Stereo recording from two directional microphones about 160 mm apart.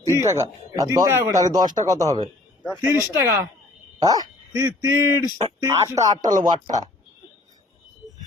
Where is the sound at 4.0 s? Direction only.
25° right (ahead or behind).